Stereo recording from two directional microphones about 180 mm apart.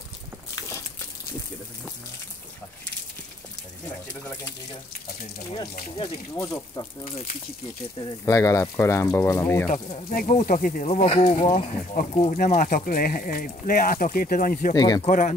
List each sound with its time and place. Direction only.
6.3 s speech: 20° left (ahead or behind)
8.0 s speech: 20° left (ahead or behind)
9.8 s speech: 30° left (ahead or behind)
10.1 s speech: 50° left (ahead or behind); by 11.4 s 30° left (ahead or behind)
11.5 s speech: 45° left (ahead or behind)
12.1 s speech: 35° left (ahead or behind)
12.4 s speech: 50° left (ahead or behind)
14.7 s speech: 20° left (ahead or behind)
15.0 s speech: 45° left (ahead or behind)